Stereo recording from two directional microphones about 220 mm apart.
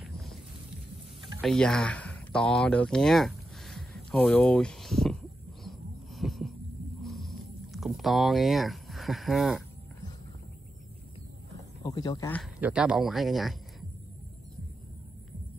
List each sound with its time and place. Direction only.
1.4 s a sound: 5° left (ahead or behind)
11.5 s speech: 20° left (ahead or behind)
12.5 s speech: 5° right (ahead or behind)